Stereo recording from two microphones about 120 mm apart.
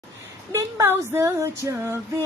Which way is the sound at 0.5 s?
25° right (ahead or behind).